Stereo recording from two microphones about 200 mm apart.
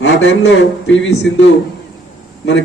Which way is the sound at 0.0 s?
65° left (ahead or behind).